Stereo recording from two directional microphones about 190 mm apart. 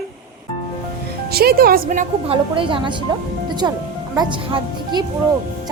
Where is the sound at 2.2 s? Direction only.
25° right (ahead or behind).